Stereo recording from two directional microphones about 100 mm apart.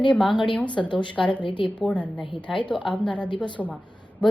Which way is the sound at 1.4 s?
55° left (ahead or behind).